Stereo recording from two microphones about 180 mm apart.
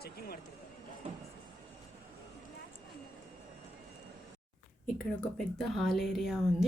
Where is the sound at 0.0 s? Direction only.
60° left (ahead or behind).